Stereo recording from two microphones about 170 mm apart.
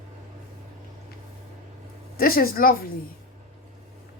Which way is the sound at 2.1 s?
60° left (ahead or behind).